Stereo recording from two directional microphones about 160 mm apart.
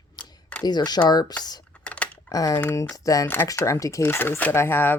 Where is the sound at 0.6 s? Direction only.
25° left (ahead or behind).